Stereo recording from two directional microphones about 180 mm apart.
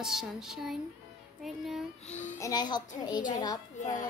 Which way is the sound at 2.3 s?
20° left (ahead or behind).